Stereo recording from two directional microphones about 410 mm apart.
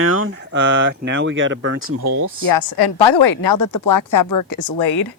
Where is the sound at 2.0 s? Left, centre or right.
Right.